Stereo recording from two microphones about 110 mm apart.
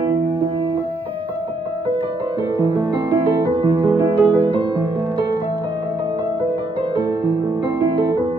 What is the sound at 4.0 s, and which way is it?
Music, 25° right (ahead or behind).